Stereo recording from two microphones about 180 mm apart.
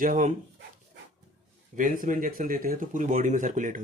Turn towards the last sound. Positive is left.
turn(degrees=-45)  # may be behind; listen again after turning